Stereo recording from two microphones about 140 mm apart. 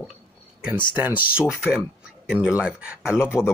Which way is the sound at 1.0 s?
10° right (ahead or behind).